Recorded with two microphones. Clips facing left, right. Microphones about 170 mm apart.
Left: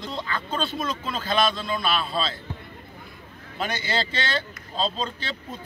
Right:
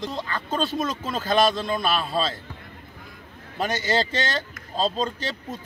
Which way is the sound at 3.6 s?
45° right (ahead or behind).